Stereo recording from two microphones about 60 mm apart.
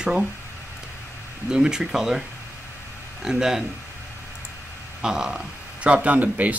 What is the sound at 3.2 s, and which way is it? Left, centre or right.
Speech, centre.